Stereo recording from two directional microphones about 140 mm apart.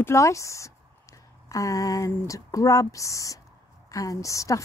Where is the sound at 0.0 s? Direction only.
20° left (ahead or behind).